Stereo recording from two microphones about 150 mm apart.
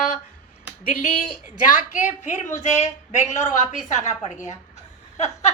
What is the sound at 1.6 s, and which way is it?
A woman's voice, 60° left (ahead or behind).